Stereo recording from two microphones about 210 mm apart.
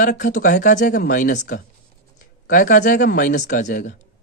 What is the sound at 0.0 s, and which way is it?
A man's voice, 40° left (ahead or behind).